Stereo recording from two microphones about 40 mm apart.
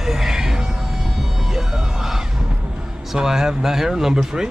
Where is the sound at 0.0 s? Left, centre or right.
Centre.